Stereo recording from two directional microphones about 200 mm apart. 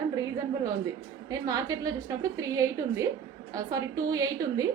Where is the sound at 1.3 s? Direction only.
20° right (ahead or behind).